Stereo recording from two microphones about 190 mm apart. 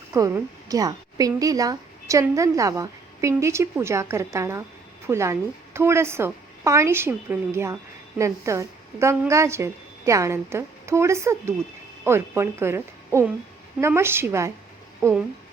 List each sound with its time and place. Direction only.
0.1 s a woman's voice: 15° right (ahead or behind)